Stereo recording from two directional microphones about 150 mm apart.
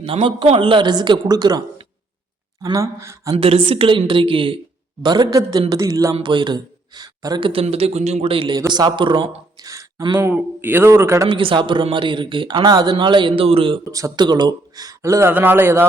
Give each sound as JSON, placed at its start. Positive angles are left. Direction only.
{"t": 0.0, "sound": "speech", "side_deg": -35}
{"t": 3.3, "sound": "speech", "side_deg": -40}
{"t": 6.1, "sound": "speech", "side_deg": -35}
{"t": 10.2, "sound": "a man's voice", "side_deg": -15}
{"t": 11.3, "sound": "speech", "side_deg": -35}
{"t": 13.9, "sound": "speech", "side_deg": -25}